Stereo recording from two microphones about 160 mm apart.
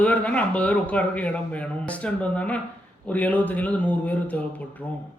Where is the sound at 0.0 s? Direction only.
10° left (ahead or behind).